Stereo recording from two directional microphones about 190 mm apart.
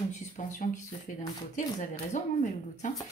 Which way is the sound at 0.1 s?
40° left (ahead or behind).